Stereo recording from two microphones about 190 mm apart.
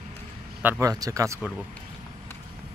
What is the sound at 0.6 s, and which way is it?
Speech, 15° right (ahead or behind).